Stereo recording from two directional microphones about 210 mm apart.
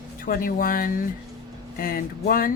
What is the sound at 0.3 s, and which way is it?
Speech, 40° left (ahead or behind).